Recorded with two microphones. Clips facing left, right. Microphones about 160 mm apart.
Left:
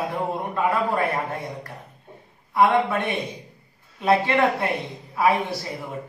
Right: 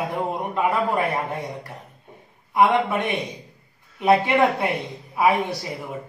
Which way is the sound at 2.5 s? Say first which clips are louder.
Even; 20° right (ahead or behind).